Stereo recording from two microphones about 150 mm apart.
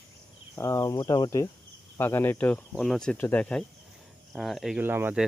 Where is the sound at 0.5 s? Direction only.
20° left (ahead or behind); by 4.8 s centre (ahead or behind).